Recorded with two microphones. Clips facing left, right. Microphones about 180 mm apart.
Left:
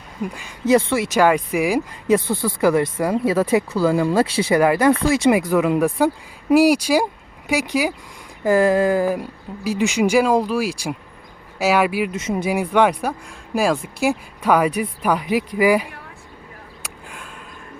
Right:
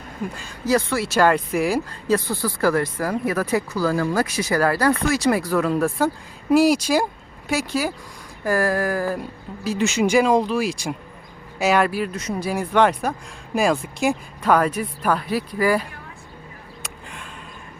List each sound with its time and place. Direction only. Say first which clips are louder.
0.3 s speech: left 5 dB; 20° left (ahead or behind)
12.1 s speech: left 4 dB; 25° left (ahead or behind)
16.8 s a sound: even; 5° left (ahead or behind)